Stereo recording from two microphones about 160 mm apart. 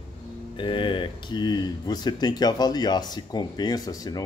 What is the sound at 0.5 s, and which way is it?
Speech, 30° left (ahead or behind).